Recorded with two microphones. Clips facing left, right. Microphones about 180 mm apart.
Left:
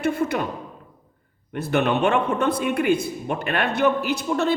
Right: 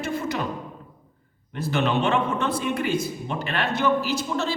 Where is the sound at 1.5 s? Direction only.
55° left (ahead or behind).